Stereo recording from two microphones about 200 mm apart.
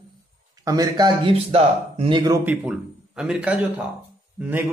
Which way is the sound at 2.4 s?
5° right (ahead or behind).